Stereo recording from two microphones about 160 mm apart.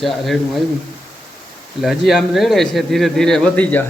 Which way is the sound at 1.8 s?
Centre (ahead or behind).